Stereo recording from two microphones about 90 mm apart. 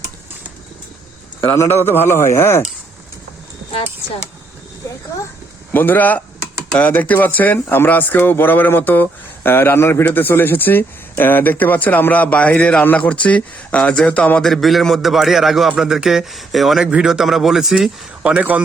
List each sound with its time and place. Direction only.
1.4 s speech: 30° left (ahead or behind)
3.7 s speech: 85° left
5.7 s speech: 20° left (ahead or behind)
14.4 s a man's voice: centre (ahead or behind)
18.2 s speech: 15° right (ahead or behind)